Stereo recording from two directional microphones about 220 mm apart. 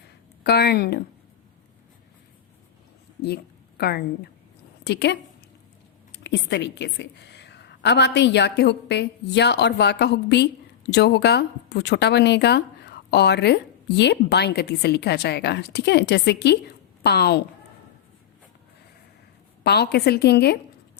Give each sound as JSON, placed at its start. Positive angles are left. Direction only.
{"t": 0.4, "sound": "speech", "side_deg": 45}
{"t": 3.2, "sound": "a sound", "side_deg": 45}
{"t": 4.8, "sound": "a woman's voice", "side_deg": 50}
{"t": 19.6, "sound": "speech", "side_deg": 50}